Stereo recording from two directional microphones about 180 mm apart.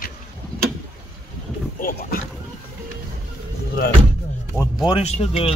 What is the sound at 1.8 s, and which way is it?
Speech, 50° left (ahead or behind).